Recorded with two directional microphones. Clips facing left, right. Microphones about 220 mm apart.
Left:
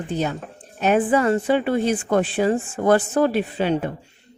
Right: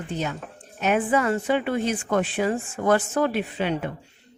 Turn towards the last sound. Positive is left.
turn(degrees=35)  # may be behind; listen again after turning